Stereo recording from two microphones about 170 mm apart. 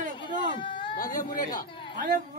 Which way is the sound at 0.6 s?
30° left (ahead or behind).